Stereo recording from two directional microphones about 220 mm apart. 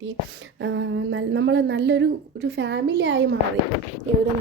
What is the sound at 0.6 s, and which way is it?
A woman's voice, 55° right (ahead or behind).